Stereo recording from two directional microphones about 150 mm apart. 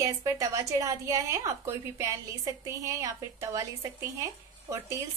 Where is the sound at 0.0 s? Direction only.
20° right (ahead or behind).